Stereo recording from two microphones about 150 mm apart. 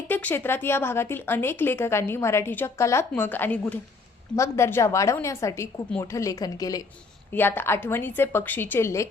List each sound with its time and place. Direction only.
0.1 s a woman's voice: 15° left (ahead or behind)
7.3 s speech: 15° left (ahead or behind)